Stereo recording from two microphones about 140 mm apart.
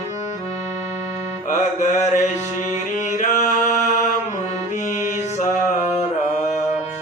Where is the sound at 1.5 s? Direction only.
55° left (ahead or behind).